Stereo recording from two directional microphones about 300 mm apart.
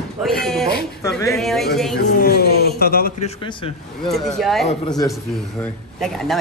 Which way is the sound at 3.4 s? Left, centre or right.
Centre.